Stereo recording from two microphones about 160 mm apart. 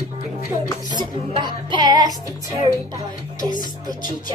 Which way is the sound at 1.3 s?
30° right (ahead or behind).